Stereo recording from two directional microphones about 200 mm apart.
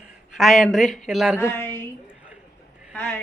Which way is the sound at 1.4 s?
10° left (ahead or behind).